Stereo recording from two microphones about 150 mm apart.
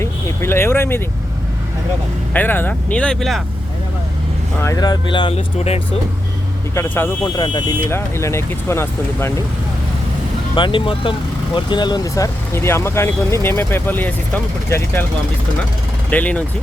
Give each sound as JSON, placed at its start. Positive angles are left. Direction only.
{"t": 0.0, "sound": "speech", "side_deg": 15}
{"t": 2.3, "sound": "speech", "side_deg": 10}
{"t": 4.6, "sound": "speech", "side_deg": 25}
{"t": 6.7, "sound": "speech", "side_deg": 15}
{"t": 7.3, "sound": "speech", "side_deg": 30}
{"t": 7.9, "sound": "speech", "side_deg": 15}
{"t": 10.5, "sound": "speech", "side_deg": 35}
{"t": 16.0, "sound": "speech", "side_deg": 10}